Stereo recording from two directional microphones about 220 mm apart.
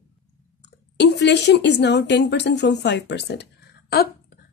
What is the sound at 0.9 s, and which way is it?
A woman's voice, 50° left (ahead or behind).